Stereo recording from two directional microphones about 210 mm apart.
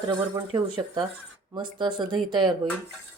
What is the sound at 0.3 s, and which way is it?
A woman's voice, 20° right (ahead or behind).